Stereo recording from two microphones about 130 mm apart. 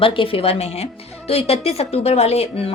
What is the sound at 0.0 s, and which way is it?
Speech, 45° left (ahead or behind).